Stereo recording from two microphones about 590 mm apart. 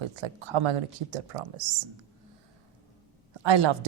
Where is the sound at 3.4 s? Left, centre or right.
Right.